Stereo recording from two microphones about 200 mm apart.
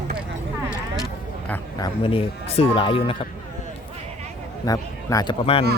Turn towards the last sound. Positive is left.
turn(degrees=25)  # may be behind; listen again after turning